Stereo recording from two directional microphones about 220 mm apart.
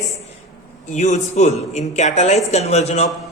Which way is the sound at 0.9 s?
30° left (ahead or behind).